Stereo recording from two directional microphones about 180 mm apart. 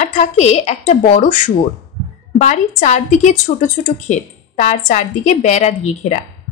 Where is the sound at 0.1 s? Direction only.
40° left (ahead or behind).